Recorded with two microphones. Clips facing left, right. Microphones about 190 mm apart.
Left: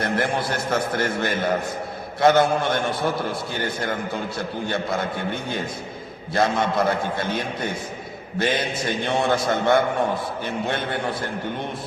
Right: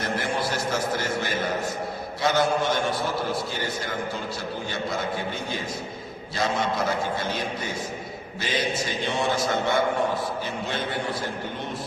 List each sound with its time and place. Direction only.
0.0 s a man's voice: 55° left (ahead or behind)